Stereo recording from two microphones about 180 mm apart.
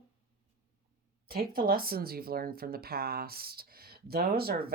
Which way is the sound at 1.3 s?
55° right (ahead or behind).